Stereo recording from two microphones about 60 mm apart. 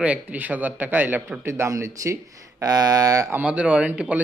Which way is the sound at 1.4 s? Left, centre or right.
Right.